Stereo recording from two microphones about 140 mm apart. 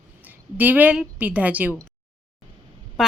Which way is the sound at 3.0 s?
Centre (ahead or behind).